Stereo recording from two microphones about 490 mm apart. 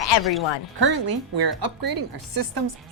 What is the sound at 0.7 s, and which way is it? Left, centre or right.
A woman's voice, right.